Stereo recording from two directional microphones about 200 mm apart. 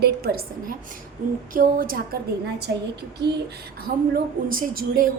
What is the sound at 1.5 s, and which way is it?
Speech, 45° right (ahead or behind).